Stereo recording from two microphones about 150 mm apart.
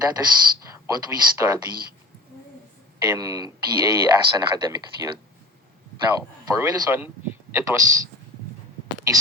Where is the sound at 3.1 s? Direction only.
25° right (ahead or behind).